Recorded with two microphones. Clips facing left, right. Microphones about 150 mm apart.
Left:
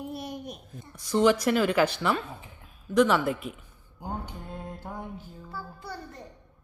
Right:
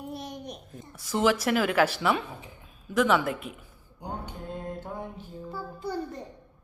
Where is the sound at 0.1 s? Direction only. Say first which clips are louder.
Left 1 dB; 5° left (ahead or behind).